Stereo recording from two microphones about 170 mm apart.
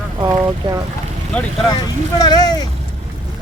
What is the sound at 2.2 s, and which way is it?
Speech, 25° left (ahead or behind).